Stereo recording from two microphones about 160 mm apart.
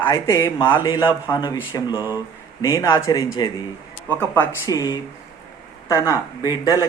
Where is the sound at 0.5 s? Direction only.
30° left (ahead or behind).